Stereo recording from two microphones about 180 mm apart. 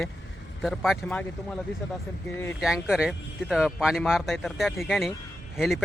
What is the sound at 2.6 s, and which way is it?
Speech, 5° right (ahead or behind).